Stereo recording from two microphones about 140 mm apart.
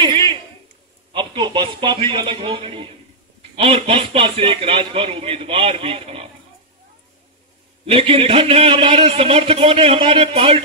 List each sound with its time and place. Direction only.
0.0 s a sound: 35° right (ahead or behind)
1.1 s a man's voice: 35° right (ahead or behind)
7.8 s a man's voice: 40° right (ahead or behind)